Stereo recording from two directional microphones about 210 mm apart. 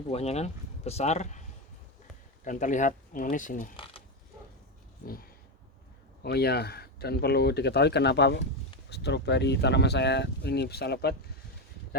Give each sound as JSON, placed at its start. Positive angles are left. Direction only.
{"t": 0.1, "sound": "speech", "side_deg": 30}
{"t": 5.0, "sound": "speech", "side_deg": 45}